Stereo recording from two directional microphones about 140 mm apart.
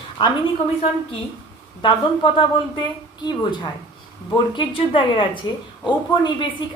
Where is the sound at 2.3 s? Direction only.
35° left (ahead or behind).